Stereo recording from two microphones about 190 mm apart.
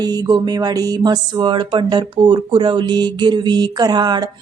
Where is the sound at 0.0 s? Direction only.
20° right (ahead or behind).